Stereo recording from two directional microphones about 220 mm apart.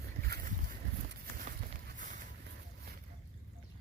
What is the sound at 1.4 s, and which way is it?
Run, 35° right (ahead or behind).